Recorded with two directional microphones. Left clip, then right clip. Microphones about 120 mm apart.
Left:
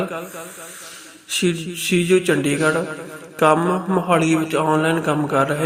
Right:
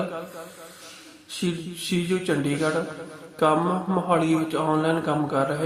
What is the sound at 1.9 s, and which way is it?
A man's voice, 20° left (ahead or behind).